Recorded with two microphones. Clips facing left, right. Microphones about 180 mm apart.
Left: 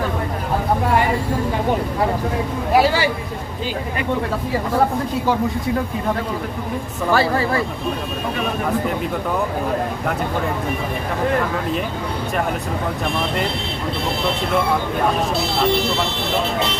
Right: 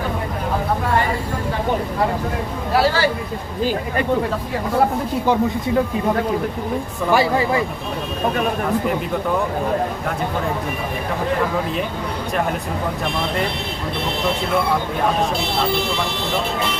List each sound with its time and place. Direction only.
2.7 s speech: 15° left (ahead or behind)
7.1 s speech: 15° right (ahead or behind)